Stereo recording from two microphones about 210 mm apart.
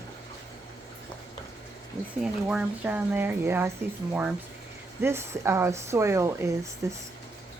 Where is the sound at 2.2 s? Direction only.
5° right (ahead or behind).